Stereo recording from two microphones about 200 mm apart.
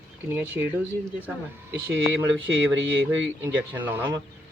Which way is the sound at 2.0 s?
65° right (ahead or behind).